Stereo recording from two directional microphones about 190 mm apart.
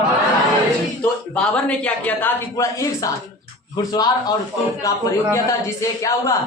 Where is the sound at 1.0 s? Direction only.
5° left (ahead or behind).